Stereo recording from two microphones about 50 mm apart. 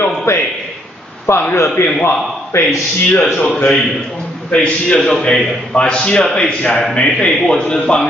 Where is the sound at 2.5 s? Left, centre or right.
Left.